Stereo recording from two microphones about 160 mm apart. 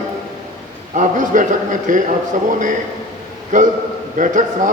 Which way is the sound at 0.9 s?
55° right (ahead or behind).